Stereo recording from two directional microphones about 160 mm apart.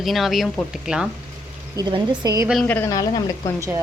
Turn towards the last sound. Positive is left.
turn(degrees=-20)  # may be behind; listen again after turning